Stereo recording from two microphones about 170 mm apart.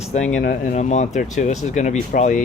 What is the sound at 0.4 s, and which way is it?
Speech, 50° left (ahead or behind).